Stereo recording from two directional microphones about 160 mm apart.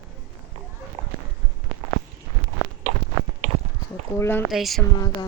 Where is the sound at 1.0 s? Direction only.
30° right (ahead or behind).